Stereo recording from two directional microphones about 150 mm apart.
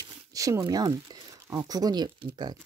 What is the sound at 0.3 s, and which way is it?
Speech, 20° right (ahead or behind).